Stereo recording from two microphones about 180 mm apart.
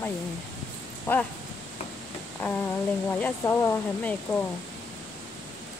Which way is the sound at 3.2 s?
15° left (ahead or behind).